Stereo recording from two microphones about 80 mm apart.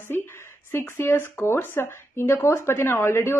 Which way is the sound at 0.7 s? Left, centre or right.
Left.